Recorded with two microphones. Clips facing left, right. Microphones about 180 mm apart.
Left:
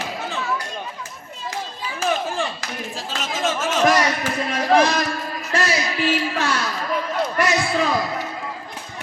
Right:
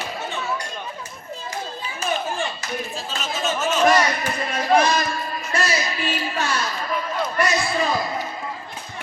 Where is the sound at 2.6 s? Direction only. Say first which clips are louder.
Right 1 dB; 90° left.